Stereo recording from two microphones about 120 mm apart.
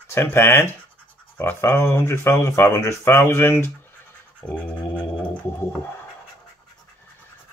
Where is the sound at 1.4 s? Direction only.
20° left (ahead or behind).